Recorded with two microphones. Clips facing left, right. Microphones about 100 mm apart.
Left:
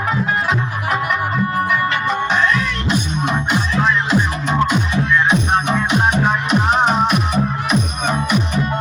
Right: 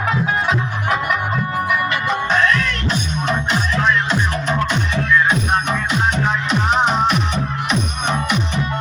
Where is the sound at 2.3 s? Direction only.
10° left (ahead or behind).